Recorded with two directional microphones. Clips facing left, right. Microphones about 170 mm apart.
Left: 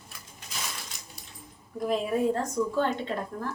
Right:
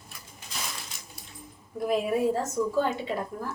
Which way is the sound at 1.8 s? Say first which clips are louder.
Right 1 dB; 5° right (ahead or behind).